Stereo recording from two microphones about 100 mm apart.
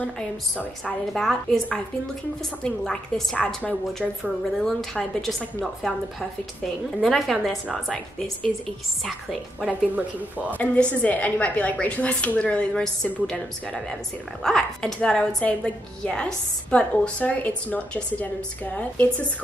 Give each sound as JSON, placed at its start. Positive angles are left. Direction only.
{"t": 1.1, "sound": "speech", "side_deg": 0}
{"t": 2.6, "sound": "a woman's voice", "side_deg": 5}
{"t": 9.7, "sound": "speech", "side_deg": -15}
{"t": 10.6, "sound": "a woman's voice", "side_deg": 10}